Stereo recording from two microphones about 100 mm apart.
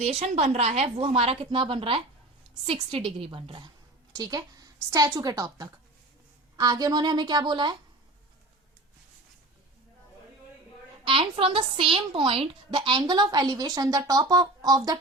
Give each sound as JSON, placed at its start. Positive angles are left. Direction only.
{"t": 0.1, "sound": "a woman's voice", "side_deg": -90}
{"t": 1.5, "sound": "a woman's voice", "side_deg": -60}
{"t": 4.1, "sound": "a woman's voice", "side_deg": -40}
{"t": 11.0, "sound": "a woman's voice", "side_deg": -65}